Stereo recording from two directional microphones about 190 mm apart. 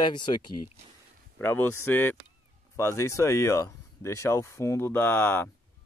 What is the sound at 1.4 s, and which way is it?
Speech, 10° left (ahead or behind).